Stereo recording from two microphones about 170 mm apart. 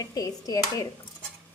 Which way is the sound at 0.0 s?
20° left (ahead or behind).